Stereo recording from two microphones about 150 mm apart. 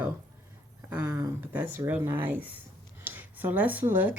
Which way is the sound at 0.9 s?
25° right (ahead or behind).